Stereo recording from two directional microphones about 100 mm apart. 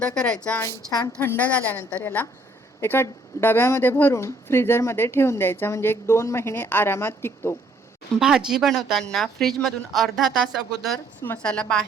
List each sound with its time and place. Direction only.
0.0 s a woman's voice: 10° left (ahead or behind)
1.2 s a woman's voice: 20° left (ahead or behind)
8.2 s a woman's voice: 5° right (ahead or behind); by 11.8 s 10° left (ahead or behind)